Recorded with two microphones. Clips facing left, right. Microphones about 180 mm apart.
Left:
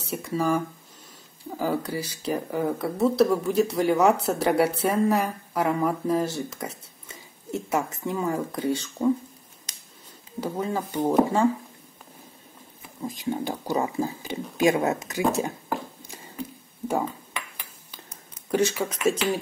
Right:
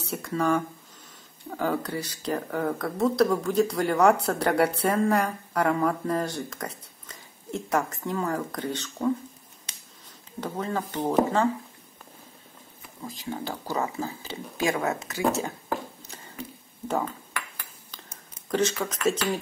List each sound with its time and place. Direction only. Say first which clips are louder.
0.1 s speech: left 1 dB; 5° left (ahead or behind)
1.6 s speech: left 1 dB; 10° left (ahead or behind)
10.4 s speech: left 2 dB; 10° left (ahead or behind)
13.0 s speech: left 5 dB; 20° left (ahead or behind)
16.8 s dishes: left 2 dB; 15° left (ahead or behind)
18.5 s speech: left 2 dB; 10° left (ahead or behind)